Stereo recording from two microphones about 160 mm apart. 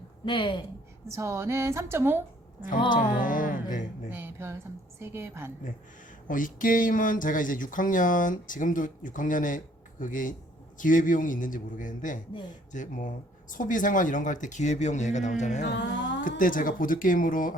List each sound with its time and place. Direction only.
0.3 s a woman's voice: 30° left (ahead or behind)
1.0 s a woman's voice: 20° right (ahead or behind)
2.6 s speech: 55° left (ahead or behind)
4.1 s a woman's voice: 15° right (ahead or behind)
6.2 s speech: 55° left (ahead or behind)
15.6 s music: 90° left
16.3 s speech: 60° left (ahead or behind)